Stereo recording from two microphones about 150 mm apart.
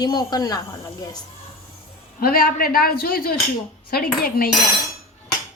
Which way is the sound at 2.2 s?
80° left.